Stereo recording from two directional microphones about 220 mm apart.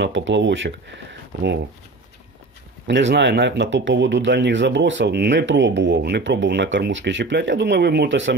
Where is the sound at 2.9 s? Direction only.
50° right (ahead or behind).